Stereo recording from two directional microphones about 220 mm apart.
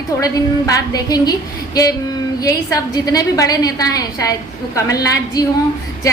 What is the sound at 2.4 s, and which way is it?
A woman's voice, 15° left (ahead or behind).